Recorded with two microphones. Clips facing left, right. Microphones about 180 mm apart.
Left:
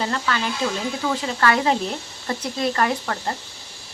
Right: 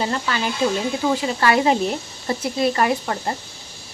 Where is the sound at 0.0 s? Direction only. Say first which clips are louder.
Right 1 dB; 20° right (ahead or behind).